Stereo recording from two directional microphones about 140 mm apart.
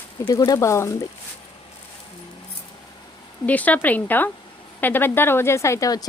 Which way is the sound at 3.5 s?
10° left (ahead or behind).